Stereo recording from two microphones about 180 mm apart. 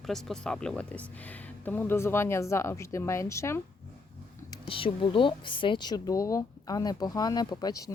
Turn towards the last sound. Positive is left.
turn(degrees=20)  # may be behind; listen again after turning